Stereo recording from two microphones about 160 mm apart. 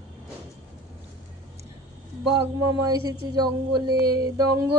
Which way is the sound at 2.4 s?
25° right (ahead or behind).